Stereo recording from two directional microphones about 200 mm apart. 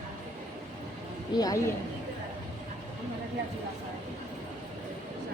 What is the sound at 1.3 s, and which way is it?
Speech, 20° left (ahead or behind).